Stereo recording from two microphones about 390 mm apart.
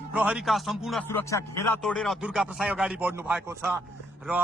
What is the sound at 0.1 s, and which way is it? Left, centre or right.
Speech, centre.